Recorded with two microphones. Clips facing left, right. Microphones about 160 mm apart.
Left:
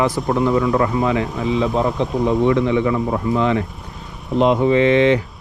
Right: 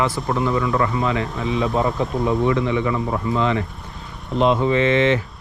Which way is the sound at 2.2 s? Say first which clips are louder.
Left 4 dB; 20° left (ahead or behind).